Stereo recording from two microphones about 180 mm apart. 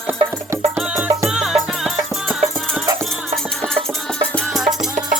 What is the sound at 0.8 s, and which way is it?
Music, 5° right (ahead or behind).